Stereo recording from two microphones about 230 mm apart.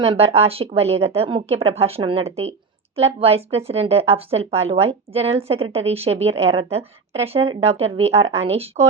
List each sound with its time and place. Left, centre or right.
0.0 s a woman's voice: right